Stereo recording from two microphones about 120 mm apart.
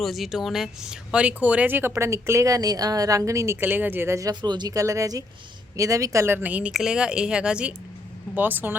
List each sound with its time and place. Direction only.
0.0 s speech: centre (ahead or behind)